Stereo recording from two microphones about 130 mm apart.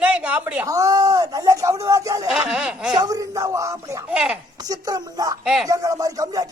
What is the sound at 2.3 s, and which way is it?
Speech, 5° right (ahead or behind).